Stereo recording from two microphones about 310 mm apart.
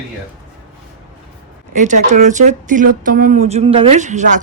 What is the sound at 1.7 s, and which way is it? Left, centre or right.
A woman's voice, right.